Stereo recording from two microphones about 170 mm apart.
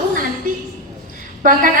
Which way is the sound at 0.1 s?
50° right (ahead or behind).